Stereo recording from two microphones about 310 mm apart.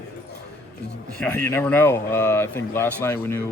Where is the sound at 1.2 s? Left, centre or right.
Centre.